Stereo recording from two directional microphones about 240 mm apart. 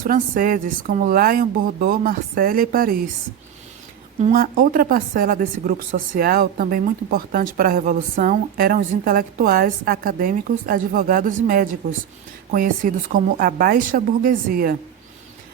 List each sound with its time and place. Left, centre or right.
0.0 s speech: right
4.2 s speech: right